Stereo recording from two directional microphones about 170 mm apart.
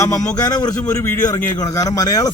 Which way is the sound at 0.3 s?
20° left (ahead or behind).